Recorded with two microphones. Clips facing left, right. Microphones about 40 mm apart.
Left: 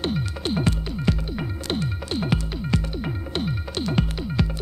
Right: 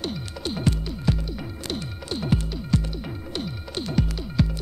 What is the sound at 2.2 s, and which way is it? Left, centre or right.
Music, left.